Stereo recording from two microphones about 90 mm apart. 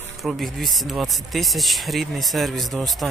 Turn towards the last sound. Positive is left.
turn(degrees=0)  # may be behind; listen again after turning